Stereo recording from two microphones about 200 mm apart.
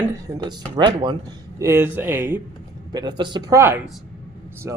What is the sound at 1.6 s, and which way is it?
Speech, 10° right (ahead or behind).